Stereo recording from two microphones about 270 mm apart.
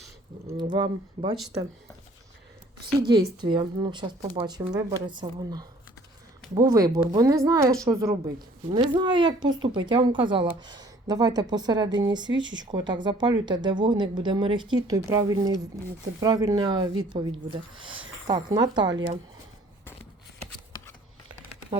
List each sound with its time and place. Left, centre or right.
0.5 s a woman's voice: centre
3.1 s a woman's voice: centre